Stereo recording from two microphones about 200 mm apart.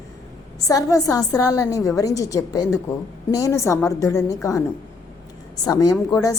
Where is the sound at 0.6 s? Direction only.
15° left (ahead or behind).